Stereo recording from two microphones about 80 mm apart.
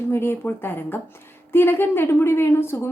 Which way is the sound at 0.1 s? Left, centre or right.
Left.